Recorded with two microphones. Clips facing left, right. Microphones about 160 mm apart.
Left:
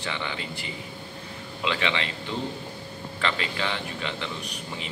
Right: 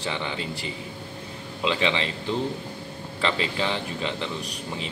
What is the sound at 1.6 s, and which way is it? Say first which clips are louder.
Speech: right 3 dB; 30° right (ahead or behind).